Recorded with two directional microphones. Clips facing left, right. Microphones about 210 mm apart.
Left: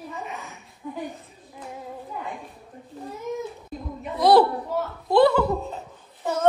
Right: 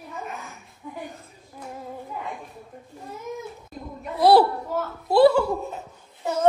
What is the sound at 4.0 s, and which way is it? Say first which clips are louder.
A woman's voice: even; centre (ahead or behind).